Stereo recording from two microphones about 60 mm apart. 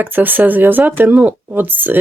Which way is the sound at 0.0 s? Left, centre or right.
Right.